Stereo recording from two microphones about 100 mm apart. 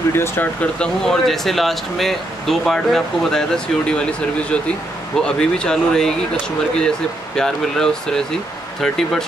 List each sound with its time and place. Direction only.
0.1 s speech: 20° left (ahead or behind); by 9.2 s 5° left (ahead or behind)